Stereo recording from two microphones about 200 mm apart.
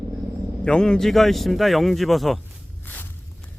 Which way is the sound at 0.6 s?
5° left (ahead or behind).